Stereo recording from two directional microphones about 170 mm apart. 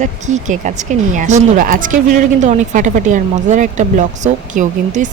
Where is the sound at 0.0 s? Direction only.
45° right (ahead or behind).